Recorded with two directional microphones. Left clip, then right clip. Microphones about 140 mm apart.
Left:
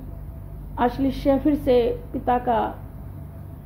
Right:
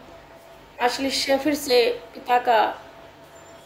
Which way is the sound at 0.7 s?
20° right (ahead or behind).